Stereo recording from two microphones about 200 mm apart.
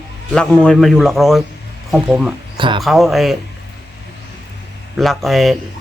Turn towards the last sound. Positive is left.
turn(degrees=0)  # may be behind; listen again after turning